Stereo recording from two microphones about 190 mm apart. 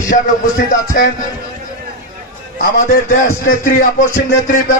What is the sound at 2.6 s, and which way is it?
Speech, 45° left (ahead or behind).